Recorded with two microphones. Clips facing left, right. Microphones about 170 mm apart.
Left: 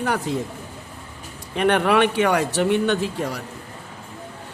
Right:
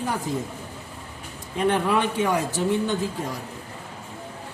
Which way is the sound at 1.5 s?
75° left (ahead or behind).